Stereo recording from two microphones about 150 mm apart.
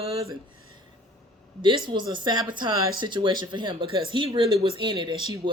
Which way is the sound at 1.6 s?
30° right (ahead or behind).